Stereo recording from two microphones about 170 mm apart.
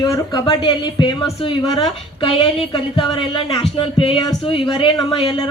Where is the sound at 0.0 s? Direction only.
20° left (ahead or behind).